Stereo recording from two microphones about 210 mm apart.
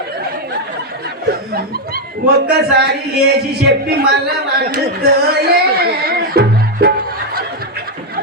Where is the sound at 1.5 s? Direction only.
45° right (ahead or behind).